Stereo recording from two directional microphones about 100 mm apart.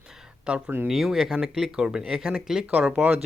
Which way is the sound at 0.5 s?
10° right (ahead or behind).